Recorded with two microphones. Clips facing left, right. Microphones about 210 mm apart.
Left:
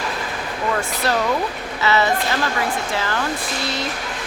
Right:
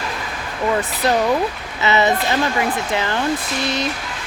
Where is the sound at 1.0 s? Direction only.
15° right (ahead or behind).